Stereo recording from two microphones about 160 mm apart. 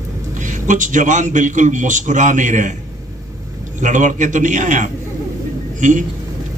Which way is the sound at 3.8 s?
50° right (ahead or behind).